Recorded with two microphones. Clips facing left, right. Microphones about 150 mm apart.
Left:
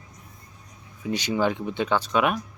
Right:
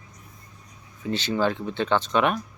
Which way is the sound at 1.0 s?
10° left (ahead or behind).